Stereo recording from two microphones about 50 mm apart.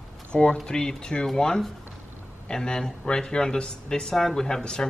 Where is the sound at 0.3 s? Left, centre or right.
Centre.